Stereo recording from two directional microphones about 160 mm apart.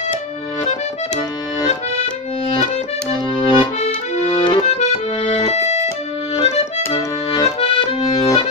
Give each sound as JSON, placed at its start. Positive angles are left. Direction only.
{"t": 3.3, "sound": "accordion", "side_deg": 30}
{"t": 4.6, "sound": "accordion", "side_deg": 45}